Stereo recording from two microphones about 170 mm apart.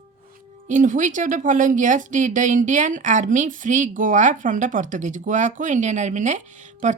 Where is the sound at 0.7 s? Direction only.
50° right (ahead or behind).